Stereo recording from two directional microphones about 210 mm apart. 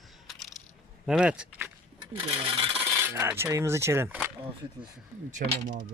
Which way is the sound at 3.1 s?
10° right (ahead or behind).